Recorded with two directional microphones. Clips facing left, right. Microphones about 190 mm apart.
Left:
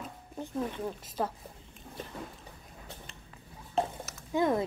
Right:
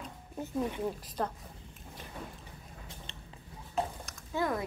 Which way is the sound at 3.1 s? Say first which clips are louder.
Right 1 dB; 25° right (ahead or behind).